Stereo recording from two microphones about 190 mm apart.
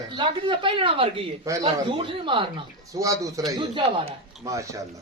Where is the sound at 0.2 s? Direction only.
25° right (ahead or behind).